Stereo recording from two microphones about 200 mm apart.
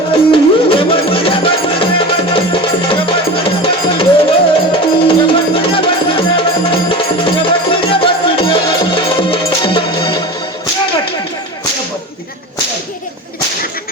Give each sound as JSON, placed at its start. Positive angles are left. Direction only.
{"t": 0.1, "sound": "music", "side_deg": 25}